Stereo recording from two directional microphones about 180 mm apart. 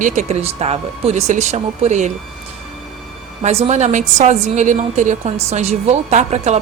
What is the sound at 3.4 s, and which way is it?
A woman's voice, 35° right (ahead or behind).